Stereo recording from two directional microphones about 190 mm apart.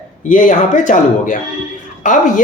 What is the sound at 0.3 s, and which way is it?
A woman's voice, 45° left (ahead or behind).